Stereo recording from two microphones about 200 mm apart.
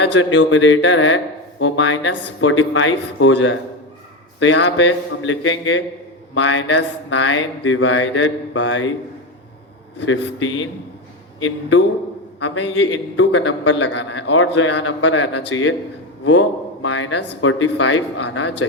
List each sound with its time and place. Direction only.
0.0 s speech: 65° left (ahead or behind)
10.0 s speech: 70° left (ahead or behind)